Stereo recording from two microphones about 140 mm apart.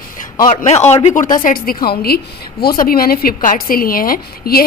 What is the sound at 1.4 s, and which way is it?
A woman's voice, 90° left.